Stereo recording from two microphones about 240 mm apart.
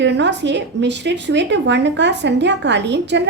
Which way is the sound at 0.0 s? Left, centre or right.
Right.